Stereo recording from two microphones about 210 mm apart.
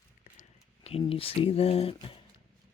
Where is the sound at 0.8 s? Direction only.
25° left (ahead or behind).